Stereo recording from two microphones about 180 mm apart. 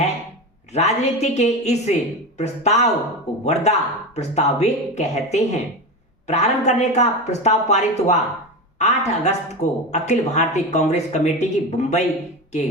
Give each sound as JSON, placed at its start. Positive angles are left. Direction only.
{"t": 0.7, "sound": "speech", "side_deg": 35}